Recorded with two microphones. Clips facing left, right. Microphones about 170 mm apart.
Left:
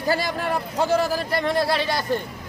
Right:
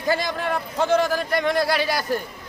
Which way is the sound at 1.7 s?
25° left (ahead or behind).